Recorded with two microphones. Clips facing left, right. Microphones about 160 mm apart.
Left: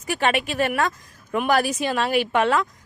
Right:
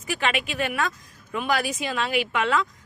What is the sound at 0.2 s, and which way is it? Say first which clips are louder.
Speech: left 5 dB; 40° left (ahead or behind).